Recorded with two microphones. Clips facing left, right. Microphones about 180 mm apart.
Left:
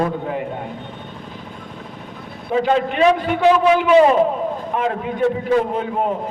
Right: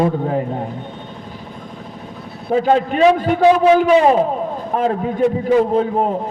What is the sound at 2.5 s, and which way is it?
A man's voice, 40° right (ahead or behind).